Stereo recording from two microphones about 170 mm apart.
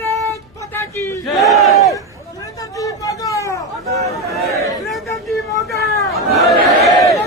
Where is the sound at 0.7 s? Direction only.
15° left (ahead or behind).